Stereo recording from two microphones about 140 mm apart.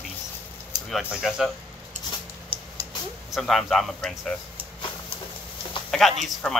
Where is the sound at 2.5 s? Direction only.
40° right (ahead or behind).